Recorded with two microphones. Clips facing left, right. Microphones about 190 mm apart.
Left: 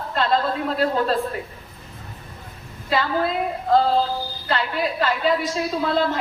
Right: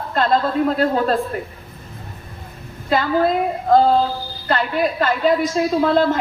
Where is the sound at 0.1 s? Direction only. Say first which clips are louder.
Right 3 dB; 45° right (ahead or behind).